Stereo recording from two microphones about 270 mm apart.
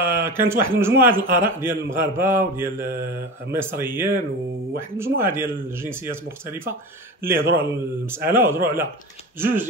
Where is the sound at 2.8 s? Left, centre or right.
Right.